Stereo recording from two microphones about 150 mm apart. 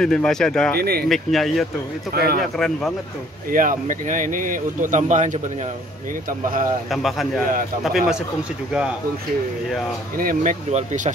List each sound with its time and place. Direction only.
0.0 s speech: 5° left (ahead or behind)
0.7 s speech: 90° right
1.0 s speech: centre (ahead or behind)
2.1 s speech: 90° right
3.5 s speech: 60° right (ahead or behind)
6.9 s speech: centre (ahead or behind)
10.1 s speech: 70° right (ahead or behind)
10.7 s speech: 50° right (ahead or behind)